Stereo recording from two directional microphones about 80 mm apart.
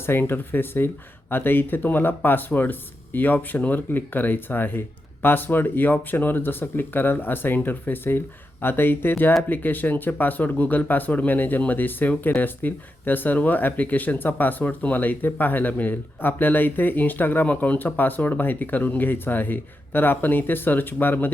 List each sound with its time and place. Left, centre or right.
0.0 s speech: left